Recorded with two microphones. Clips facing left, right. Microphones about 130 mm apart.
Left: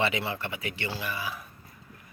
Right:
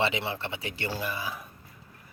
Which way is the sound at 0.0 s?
25° right (ahead or behind).